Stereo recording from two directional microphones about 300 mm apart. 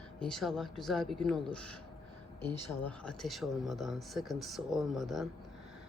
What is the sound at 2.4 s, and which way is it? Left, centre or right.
Speech, centre.